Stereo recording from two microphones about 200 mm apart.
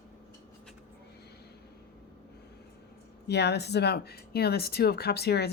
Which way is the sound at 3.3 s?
55° left (ahead or behind).